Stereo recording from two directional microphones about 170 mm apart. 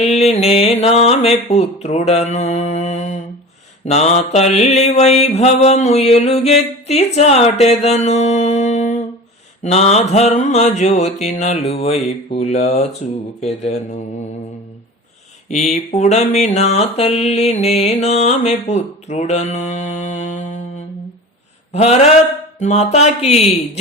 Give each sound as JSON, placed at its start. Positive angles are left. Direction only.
{"t": 0.0, "sound": "mantra", "side_deg": 40}
{"t": 15.4, "sound": "mantra", "side_deg": 40}
{"t": 21.7, "sound": "mantra", "side_deg": 40}